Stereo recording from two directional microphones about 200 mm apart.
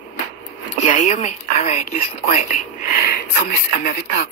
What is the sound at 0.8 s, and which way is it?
Speech, 35° left (ahead or behind).